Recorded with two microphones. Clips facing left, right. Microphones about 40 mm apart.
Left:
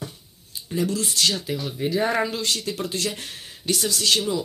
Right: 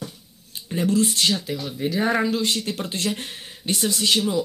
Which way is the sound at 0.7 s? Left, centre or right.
Right.